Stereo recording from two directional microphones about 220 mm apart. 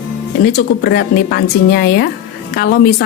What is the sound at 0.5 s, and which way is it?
Speech, 45° left (ahead or behind).